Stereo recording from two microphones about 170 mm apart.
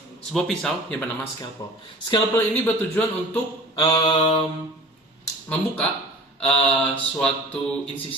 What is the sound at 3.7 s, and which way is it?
Mantra, 25° left (ahead or behind).